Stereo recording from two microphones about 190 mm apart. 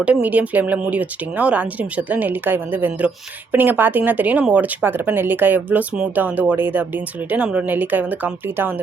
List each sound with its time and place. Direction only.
0.0 s speech: 5° right (ahead or behind)